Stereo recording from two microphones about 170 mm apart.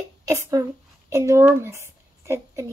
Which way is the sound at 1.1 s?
15° right (ahead or behind).